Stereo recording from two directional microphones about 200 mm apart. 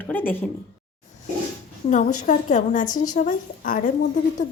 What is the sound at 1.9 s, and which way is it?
Speech, 40° left (ahead or behind).